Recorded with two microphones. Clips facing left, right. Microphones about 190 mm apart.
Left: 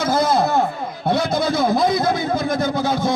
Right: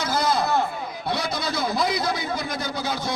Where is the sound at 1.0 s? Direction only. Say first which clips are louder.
Left 9 dB; 50° left (ahead or behind).